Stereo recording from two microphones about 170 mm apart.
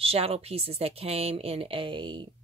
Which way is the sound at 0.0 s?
35° right (ahead or behind).